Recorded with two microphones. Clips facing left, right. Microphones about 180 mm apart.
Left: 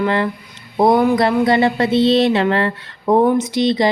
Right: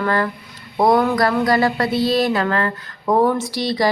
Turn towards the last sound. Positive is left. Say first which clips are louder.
# left 5 dB
turn(degrees=20)  # may be behind; listen again after turning